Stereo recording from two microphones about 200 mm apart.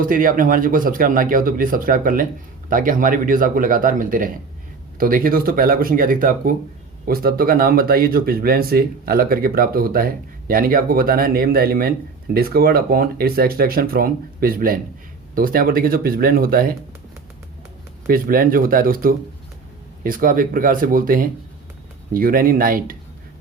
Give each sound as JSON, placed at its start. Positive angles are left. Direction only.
{"t": 0.0, "sound": "speech", "side_deg": -45}
{"t": 18.1, "sound": "speech", "side_deg": -45}